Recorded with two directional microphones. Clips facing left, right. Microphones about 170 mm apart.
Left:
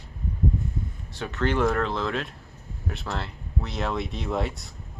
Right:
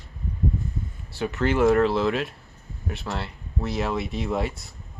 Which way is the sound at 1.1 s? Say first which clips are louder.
Right 2 dB; 10° right (ahead or behind).